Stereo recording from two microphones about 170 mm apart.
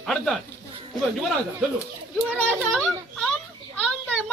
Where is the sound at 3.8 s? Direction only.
5° left (ahead or behind).